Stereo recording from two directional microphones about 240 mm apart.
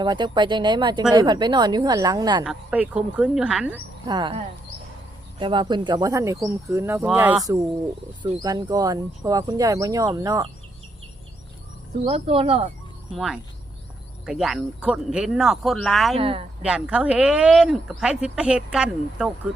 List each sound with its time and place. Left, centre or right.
0.0 s speech: centre
2.4 s speech: centre
4.1 s speech: right
12.0 s speech: right
13.1 s speech: centre
16.1 s speech: right
16.6 s speech: centre